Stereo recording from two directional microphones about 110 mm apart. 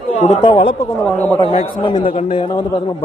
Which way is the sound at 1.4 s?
60° left (ahead or behind).